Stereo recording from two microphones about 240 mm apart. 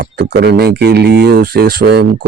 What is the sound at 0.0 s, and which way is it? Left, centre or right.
Speech, right.